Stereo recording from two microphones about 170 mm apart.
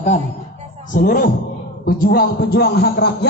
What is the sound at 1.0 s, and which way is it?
Speech, 55° left (ahead or behind).